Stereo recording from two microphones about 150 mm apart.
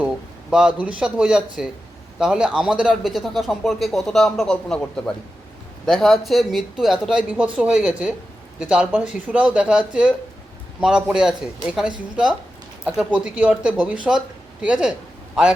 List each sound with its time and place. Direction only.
0.8 s a man's voice: 5° right (ahead or behind)